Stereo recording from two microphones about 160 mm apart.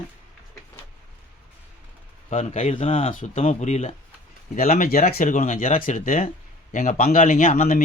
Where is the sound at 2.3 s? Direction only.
45° left (ahead or behind).